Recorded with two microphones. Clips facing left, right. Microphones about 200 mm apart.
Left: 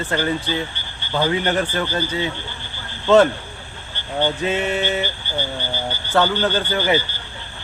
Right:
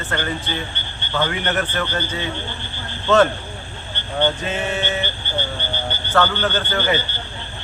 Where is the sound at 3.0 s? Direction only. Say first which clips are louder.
Left 2 dB; 10° left (ahead or behind).